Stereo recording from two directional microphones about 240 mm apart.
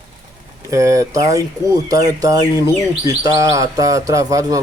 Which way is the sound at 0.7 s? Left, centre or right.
Centre.